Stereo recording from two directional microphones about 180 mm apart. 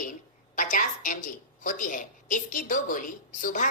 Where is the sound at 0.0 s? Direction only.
45° left (ahead or behind).